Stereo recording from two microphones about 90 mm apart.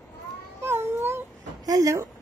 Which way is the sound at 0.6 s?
25° right (ahead or behind).